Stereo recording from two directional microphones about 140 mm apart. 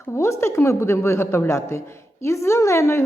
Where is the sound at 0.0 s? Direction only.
20° left (ahead or behind).